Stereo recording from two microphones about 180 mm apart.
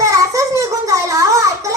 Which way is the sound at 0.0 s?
15° right (ahead or behind).